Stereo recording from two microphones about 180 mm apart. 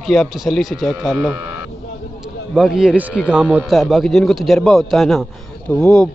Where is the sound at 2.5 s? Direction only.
Centre (ahead or behind).